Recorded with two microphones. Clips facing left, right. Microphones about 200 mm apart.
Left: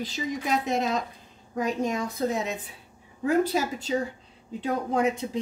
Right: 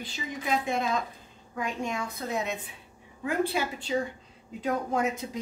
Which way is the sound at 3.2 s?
40° left (ahead or behind).